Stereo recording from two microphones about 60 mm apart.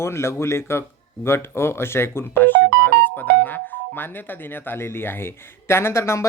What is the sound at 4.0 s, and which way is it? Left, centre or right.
Speech, left.